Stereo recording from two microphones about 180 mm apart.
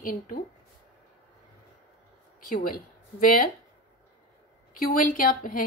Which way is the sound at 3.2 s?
50° left (ahead or behind).